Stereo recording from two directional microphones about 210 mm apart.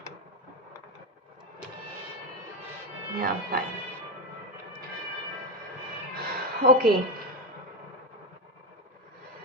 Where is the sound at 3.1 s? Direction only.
45° right (ahead or behind).